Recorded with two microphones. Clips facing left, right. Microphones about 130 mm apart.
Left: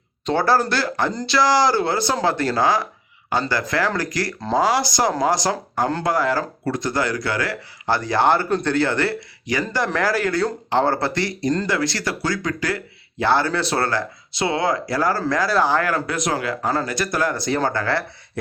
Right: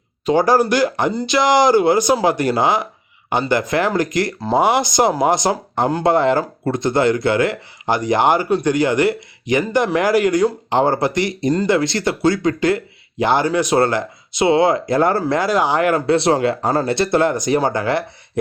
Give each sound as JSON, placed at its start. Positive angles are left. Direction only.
{"t": 0.3, "sound": "speech", "side_deg": -15}